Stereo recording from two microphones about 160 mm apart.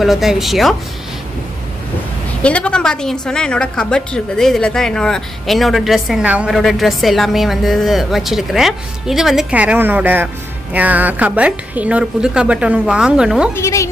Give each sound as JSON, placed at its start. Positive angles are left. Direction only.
{"t": 0.0, "sound": "a woman's voice", "side_deg": 0}
{"t": 2.4, "sound": "a woman's voice", "side_deg": 5}
{"t": 13.6, "sound": "a woman's voice", "side_deg": 20}